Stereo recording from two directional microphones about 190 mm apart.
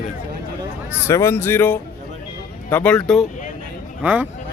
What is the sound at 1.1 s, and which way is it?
Speech, 15° left (ahead or behind).